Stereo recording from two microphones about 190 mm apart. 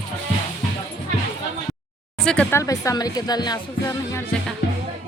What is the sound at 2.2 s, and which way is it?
Speech, 5° left (ahead or behind).